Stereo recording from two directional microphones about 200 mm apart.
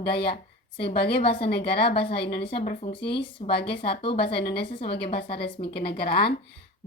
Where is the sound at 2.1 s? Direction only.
55° left (ahead or behind).